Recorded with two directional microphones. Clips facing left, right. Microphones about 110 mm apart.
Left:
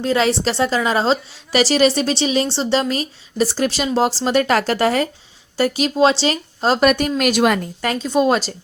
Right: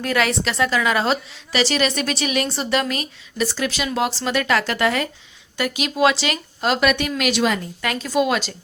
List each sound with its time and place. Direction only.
0.0 s a woman's voice: 25° left (ahead or behind); by 7.6 s 50° left (ahead or behind)
7.9 s a woman's voice: 20° left (ahead or behind)
8.2 s a woman's voice: 35° left (ahead or behind)